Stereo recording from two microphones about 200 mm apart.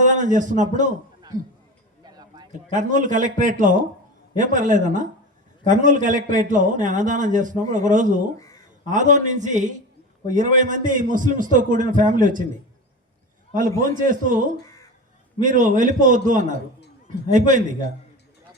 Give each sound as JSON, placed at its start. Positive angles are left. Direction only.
{"t": 0.0, "sound": "a man's voice", "side_deg": -40}
{"t": 2.0, "sound": "a sound", "side_deg": -20}
{"t": 2.5, "sound": "a man's voice", "side_deg": -40}
{"t": 13.5, "sound": "a man's voice", "side_deg": -40}